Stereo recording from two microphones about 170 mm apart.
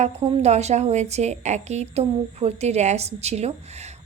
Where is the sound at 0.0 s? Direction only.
40° right (ahead or behind).